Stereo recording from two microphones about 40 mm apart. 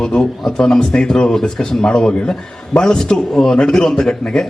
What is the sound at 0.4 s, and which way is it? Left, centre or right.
Speech, centre.